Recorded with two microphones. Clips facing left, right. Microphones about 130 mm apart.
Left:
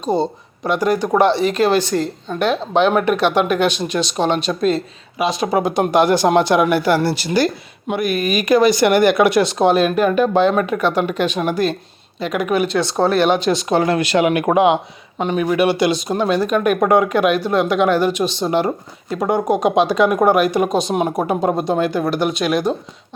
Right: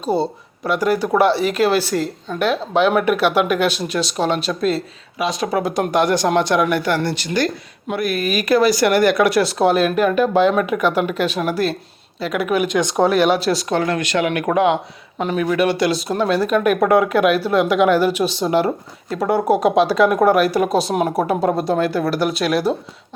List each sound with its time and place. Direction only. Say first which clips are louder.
0.0 s speech: left 1 dB; 10° right (ahead or behind)
12.6 s speech: even; 15° right (ahead or behind)
13.7 s speech: left 6 dB; 25° left (ahead or behind)
15.2 s speech: left 1 dB; centre (ahead or behind)